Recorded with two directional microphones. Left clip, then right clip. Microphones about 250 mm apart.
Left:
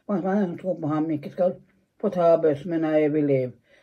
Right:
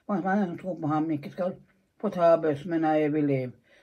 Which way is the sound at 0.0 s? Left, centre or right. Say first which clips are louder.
Left 2 dB; centre.